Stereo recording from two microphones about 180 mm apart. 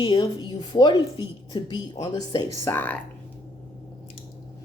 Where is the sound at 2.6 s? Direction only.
10° left (ahead or behind).